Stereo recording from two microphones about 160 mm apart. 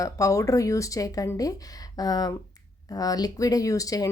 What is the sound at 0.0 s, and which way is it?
Speech, 20° left (ahead or behind).